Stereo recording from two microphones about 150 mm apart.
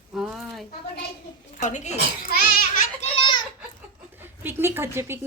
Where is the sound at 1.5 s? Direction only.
55° left (ahead or behind).